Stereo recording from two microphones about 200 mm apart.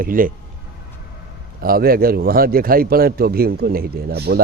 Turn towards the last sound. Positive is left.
turn(degrees=-55)  # may be behind; listen again after turning